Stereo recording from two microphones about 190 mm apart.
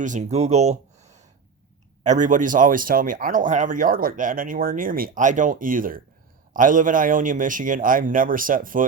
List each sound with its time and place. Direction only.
0.0 s speech: 40° right (ahead or behind)